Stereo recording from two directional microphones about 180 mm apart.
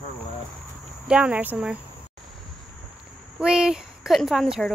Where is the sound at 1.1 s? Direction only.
5° right (ahead or behind).